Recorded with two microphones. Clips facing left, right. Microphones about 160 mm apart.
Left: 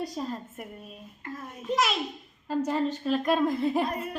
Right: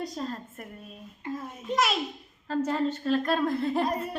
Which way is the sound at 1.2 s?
15° right (ahead or behind).